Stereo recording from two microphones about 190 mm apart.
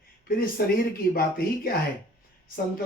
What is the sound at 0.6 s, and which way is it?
Speech, 50° left (ahead or behind).